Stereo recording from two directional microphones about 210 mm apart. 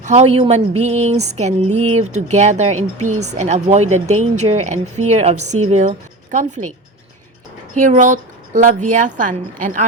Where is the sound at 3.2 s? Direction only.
35° right (ahead or behind).